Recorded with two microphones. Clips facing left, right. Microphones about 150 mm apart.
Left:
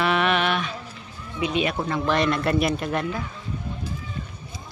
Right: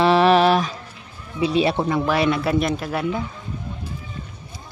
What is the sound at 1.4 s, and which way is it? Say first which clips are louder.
Speech: right 5 dB; 35° right (ahead or behind).